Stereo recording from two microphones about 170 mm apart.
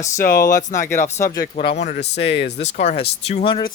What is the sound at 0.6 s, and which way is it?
Speech, 45° left (ahead or behind).